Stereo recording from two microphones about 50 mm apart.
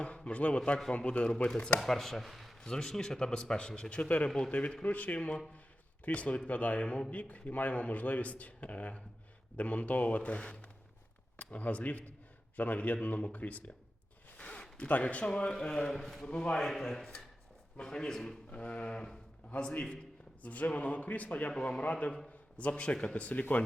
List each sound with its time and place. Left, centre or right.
0.3 s a man's voice: left
1.8 s speech: centre
2.6 s a man's voice: centre; by 13.7 s left
14.3 s zipper: left
14.8 s a man's voice: left; by 16.2 s centre
16.2 s a man's voice: centre
16.6 s a man's voice: centre
18.5 s a man's voice: left
20.4 s a man's voice: left
21.5 s speech: centre
21.8 s a man's voice: left
23.3 s speech: left